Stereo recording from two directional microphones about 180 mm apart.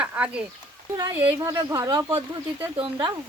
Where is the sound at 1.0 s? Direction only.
15° right (ahead or behind).